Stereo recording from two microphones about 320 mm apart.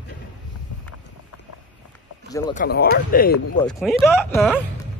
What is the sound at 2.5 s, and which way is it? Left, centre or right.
Speech, left.